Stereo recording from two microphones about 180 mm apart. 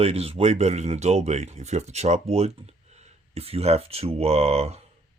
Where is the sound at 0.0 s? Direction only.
35° right (ahead or behind).